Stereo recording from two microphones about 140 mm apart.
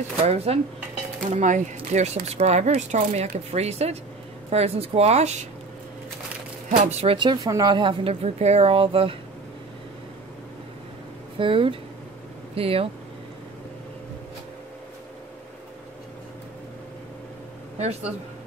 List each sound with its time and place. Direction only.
0.2 s speech: 45° right (ahead or behind)
1.3 s speech: 60° right (ahead or behind)
6.7 s speech: 60° right (ahead or behind)
7.2 s speech: 30° right (ahead or behind)
11.3 s speech: 40° right (ahead or behind)
17.7 s speech: 50° right (ahead or behind)